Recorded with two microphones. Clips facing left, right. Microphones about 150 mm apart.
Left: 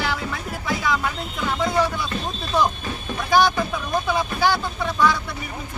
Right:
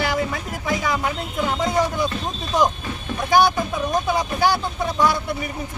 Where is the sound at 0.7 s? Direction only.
15° right (ahead or behind).